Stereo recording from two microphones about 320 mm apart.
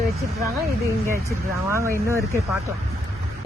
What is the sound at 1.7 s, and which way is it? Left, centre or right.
Speech, centre.